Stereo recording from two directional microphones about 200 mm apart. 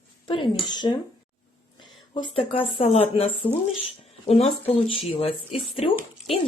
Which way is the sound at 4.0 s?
30° left (ahead or behind).